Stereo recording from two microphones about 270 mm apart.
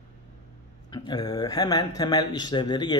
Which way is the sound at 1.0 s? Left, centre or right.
Centre.